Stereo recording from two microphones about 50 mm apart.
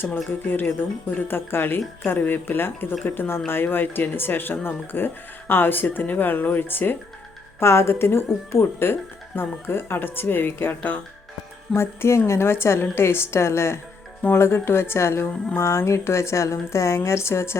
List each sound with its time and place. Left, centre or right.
0.3 s speech: left
7.6 s speech: left
11.7 s a woman's voice: left